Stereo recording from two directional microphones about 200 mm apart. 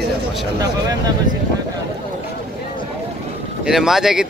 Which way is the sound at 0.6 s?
20° right (ahead or behind).